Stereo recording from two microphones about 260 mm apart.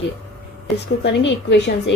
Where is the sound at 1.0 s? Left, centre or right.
Left.